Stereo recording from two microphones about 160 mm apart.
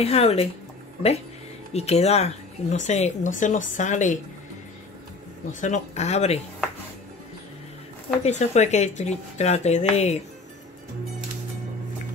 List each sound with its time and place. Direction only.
0.0 s speech: 40° left (ahead or behind)
1.7 s speech: 40° left (ahead or behind)
5.6 s speech: 45° left (ahead or behind)
8.2 s speech: 45° left (ahead or behind)